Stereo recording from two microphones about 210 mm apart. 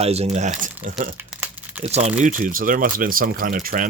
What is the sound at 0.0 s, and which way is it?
Speech, 30° right (ahead or behind).